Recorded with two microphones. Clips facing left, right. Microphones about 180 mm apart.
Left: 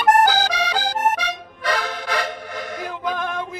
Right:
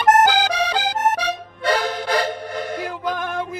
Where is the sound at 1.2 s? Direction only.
35° right (ahead or behind).